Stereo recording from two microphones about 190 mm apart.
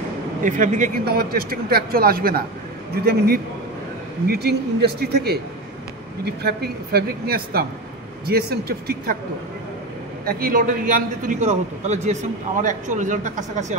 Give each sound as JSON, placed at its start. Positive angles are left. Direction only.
{"t": 0.4, "sound": "a man's voice", "side_deg": -40}
{"t": 10.2, "sound": "a man's voice", "side_deg": -45}